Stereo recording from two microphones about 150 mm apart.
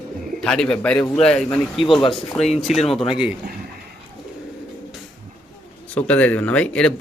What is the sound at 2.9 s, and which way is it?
Speech, centre (ahead or behind).